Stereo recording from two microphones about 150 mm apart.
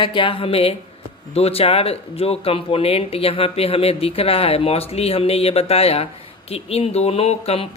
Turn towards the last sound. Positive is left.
turn(degrees=40)  # may be behind; listen again after turning